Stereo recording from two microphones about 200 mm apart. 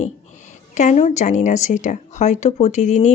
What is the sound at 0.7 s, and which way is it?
A woman's voice, 35° left (ahead or behind).